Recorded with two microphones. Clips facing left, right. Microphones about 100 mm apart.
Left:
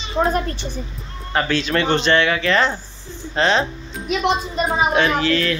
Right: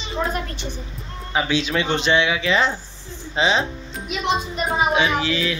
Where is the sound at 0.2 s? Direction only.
25° left (ahead or behind).